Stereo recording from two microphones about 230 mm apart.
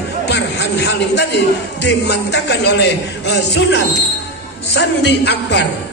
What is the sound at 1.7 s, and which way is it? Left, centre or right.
A man's voice, left.